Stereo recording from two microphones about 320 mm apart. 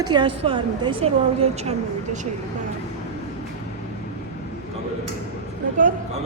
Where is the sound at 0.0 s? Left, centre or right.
Centre.